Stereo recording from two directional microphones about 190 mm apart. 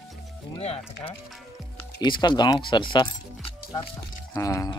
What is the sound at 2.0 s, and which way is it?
Speech, 25° left (ahead or behind).